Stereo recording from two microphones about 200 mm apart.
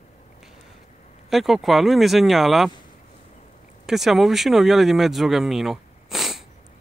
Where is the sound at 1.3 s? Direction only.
Centre (ahead or behind).